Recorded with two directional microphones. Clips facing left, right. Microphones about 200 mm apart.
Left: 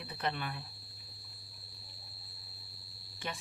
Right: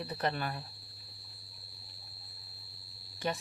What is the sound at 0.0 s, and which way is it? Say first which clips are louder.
Speech: right 4 dB; 40° right (ahead or behind).